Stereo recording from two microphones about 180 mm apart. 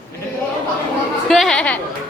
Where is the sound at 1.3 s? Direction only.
Centre (ahead or behind).